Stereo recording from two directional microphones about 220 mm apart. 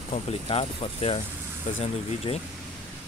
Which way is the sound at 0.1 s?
25° left (ahead or behind).